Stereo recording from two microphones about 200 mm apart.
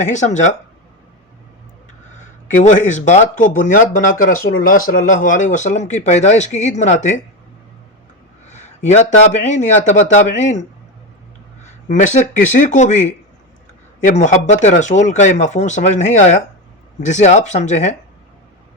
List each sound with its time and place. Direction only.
0.0 s speech: 35° left (ahead or behind)
2.1 s speech: 40° left (ahead or behind)
8.4 s speech: 35° left (ahead or behind)
14.0 s speech: 35° left (ahead or behind)